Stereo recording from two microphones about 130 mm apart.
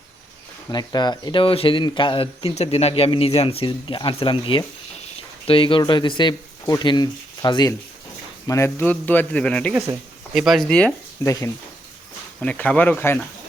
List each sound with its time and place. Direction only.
0.7 s speech: 35° left (ahead or behind)
8.4 s a man's voice: 20° left (ahead or behind)
11.2 s speech: 25° left (ahead or behind)
12.4 s a man's voice: 10° left (ahead or behind)